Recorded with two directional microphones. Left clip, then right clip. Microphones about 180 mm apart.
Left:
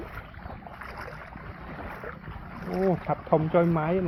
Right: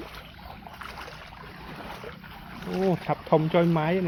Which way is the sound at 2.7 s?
60° right (ahead or behind).